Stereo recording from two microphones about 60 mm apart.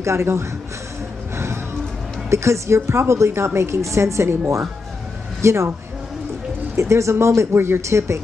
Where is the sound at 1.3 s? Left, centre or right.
Right.